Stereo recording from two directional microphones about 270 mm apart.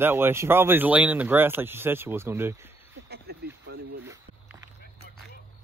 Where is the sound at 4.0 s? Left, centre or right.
Centre.